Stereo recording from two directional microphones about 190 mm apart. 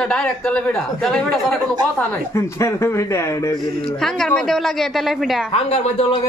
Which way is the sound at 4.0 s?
Centre (ahead or behind).